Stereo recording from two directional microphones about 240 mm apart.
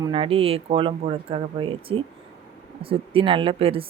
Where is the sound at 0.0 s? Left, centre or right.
Right.